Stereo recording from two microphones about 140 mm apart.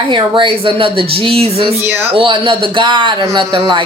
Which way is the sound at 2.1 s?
40° right (ahead or behind).